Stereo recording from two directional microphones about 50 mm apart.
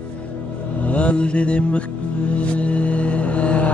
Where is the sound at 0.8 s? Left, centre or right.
Left.